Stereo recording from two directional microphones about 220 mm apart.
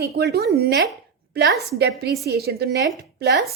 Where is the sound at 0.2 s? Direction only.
45° right (ahead or behind).